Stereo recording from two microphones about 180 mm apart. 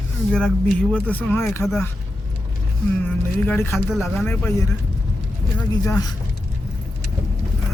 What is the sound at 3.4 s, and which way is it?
Speech, 10° left (ahead or behind).